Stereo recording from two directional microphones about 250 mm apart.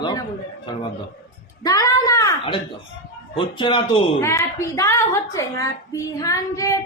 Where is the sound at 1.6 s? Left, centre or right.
Centre.